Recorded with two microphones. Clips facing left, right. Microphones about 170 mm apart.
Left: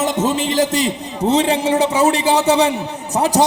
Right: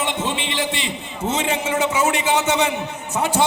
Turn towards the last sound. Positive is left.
turn(degrees=35)  # may be behind; listen again after turning